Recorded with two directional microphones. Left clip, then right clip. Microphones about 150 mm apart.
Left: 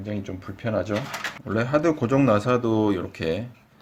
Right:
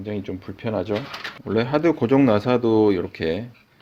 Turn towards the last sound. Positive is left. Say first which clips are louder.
# right 3 dB
turn(degrees=-35)  # may be behind; listen again after turning